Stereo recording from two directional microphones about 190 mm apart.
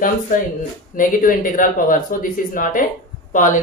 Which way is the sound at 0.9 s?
45° left (ahead or behind).